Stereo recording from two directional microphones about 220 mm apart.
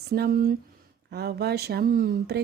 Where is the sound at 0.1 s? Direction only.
45° right (ahead or behind).